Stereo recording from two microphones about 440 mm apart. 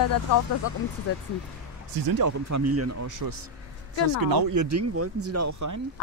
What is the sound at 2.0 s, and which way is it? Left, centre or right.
Speech, right.